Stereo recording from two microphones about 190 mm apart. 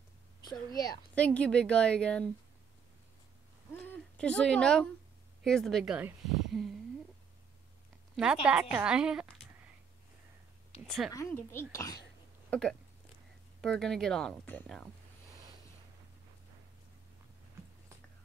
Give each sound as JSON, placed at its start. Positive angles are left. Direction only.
{"t": 1.1, "sound": "speech", "side_deg": 5}
{"t": 3.7, "sound": "a sound", "side_deg": 10}
{"t": 5.4, "sound": "speech", "side_deg": 5}
{"t": 8.2, "sound": "speech", "side_deg": -5}
{"t": 11.1, "sound": "speech", "side_deg": 15}
{"t": 12.4, "sound": "a sound", "side_deg": 5}
{"t": 13.6, "sound": "speech", "side_deg": 0}